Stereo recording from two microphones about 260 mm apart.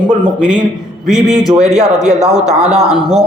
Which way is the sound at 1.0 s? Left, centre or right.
Centre.